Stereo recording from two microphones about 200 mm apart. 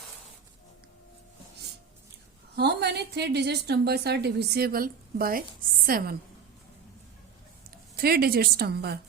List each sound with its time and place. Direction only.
2.6 s a woman's voice: 55° right (ahead or behind)
7.9 s a woman's voice: 50° right (ahead or behind)